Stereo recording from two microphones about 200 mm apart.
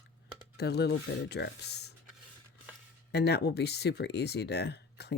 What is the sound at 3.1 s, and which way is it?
Speech, 55° left (ahead or behind).